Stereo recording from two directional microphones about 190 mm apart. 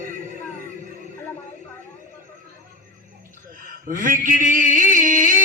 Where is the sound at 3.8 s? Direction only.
45° right (ahead or behind).